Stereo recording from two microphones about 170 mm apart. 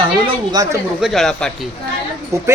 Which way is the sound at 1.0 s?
Centre (ahead or behind).